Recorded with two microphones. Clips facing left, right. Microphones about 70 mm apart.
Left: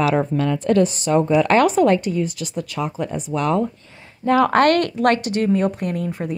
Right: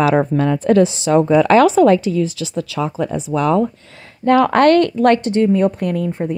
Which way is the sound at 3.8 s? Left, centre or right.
Right.